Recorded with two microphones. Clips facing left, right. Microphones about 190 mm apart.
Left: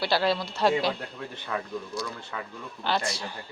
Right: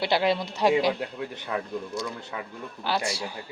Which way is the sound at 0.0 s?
20° right (ahead or behind).